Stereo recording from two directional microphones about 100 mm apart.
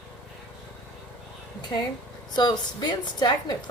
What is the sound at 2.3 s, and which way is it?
A woman's voice, 45° left (ahead or behind).